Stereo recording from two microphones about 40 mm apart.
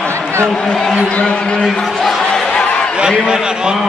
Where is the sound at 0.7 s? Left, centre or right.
Centre.